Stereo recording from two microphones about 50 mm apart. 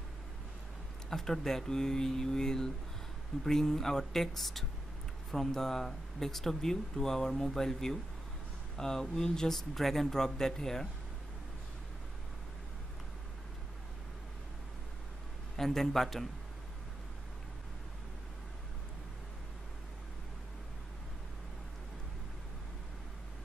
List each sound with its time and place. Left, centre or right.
1.1 s speech: centre
15.5 s a man's voice: centre